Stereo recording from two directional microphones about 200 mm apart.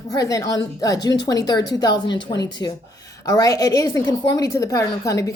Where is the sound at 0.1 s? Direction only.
15° left (ahead or behind).